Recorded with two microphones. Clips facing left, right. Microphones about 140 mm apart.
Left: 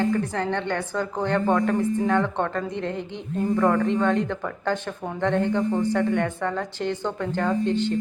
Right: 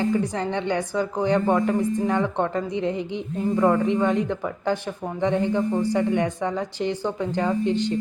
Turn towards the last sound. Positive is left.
turn(degrees=-15)  # may be behind; listen again after turning